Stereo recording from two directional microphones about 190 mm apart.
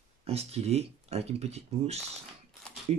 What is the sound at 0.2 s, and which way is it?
Speech, 35° right (ahead or behind).